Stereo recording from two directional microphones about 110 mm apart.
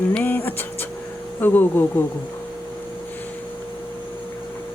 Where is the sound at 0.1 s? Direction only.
15° left (ahead or behind).